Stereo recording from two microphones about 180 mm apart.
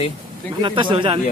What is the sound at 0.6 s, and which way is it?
Speech, 25° right (ahead or behind).